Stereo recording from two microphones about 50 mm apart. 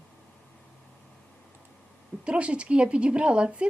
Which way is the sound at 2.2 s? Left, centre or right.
Right.